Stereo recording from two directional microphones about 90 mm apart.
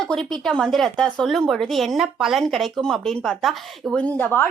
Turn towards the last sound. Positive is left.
turn(degrees=20)  # may be behind; listen again after turning